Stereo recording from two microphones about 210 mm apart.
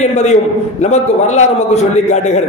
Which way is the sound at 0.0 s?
35° left (ahead or behind).